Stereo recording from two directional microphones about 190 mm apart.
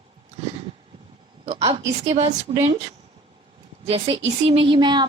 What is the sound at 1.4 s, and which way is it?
Speech, 35° right (ahead or behind).